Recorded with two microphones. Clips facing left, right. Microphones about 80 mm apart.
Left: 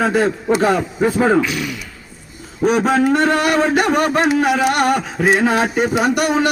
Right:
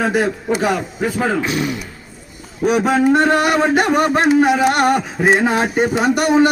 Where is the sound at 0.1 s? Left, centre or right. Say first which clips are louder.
Left 2 dB; centre.